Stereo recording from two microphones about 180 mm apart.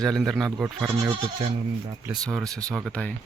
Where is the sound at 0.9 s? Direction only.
20° right (ahead or behind).